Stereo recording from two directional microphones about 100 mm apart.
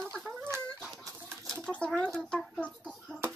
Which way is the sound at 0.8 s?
Centre (ahead or behind).